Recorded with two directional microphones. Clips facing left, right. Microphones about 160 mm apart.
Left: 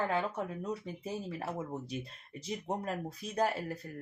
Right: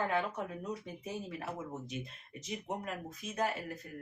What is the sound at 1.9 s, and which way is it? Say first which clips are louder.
Speech: left 2 dB; 35° left (ahead or behind).